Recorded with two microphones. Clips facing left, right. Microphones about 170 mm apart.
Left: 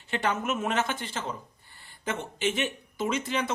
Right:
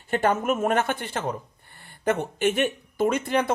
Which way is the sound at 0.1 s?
50° right (ahead or behind).